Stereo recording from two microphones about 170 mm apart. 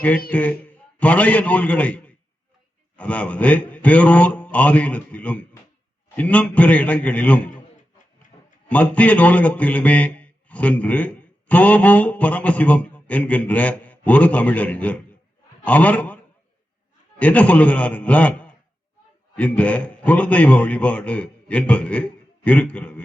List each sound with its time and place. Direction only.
0.3 s a man's voice: 10° left (ahead or behind)
8.3 s a sound: 30° left (ahead or behind)
8.7 s a man's voice: 10° left (ahead or behind)